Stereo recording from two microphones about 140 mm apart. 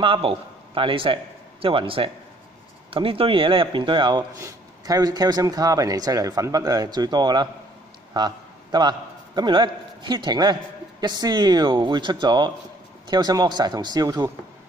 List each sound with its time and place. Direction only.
0.0 s a man's voice: 40° right (ahead or behind)
8.7 s a man's voice: 30° right (ahead or behind)